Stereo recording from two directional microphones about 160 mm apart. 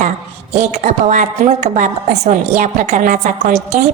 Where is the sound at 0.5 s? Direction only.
45° right (ahead or behind).